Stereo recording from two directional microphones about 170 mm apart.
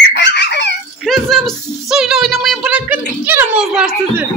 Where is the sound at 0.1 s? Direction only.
85° left.